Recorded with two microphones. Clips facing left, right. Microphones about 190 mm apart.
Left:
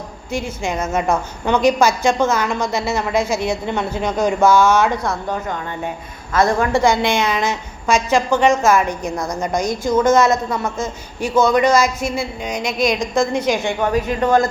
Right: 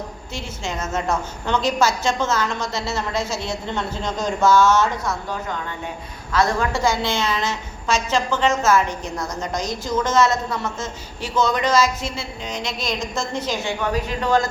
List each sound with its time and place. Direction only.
0.3 s a man's voice: 15° left (ahead or behind)
5.0 s a woman's voice: 50° left (ahead or behind)
6.9 s a man's voice: 15° left (ahead or behind)
13.6 s a woman's voice: 50° left (ahead or behind)